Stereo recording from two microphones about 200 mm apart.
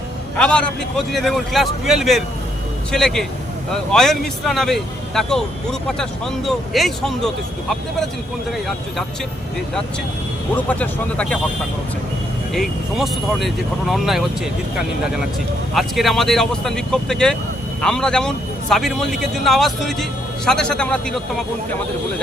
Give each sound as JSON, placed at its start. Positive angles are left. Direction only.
{"t": 0.3, "sound": "a man's voice", "side_deg": 5}
{"t": 10.5, "sound": "speech", "side_deg": 5}
{"t": 12.5, "sound": "a man's voice", "side_deg": 0}
{"t": 15.7, "sound": "a man's voice", "side_deg": 0}